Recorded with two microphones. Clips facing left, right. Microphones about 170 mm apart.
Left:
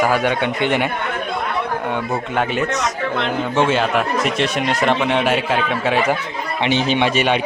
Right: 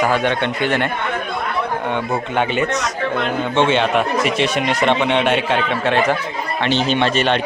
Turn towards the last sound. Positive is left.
turn(degrees=10)  # may be behind; listen again after turning